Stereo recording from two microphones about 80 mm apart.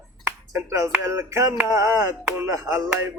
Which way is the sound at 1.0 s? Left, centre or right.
Right.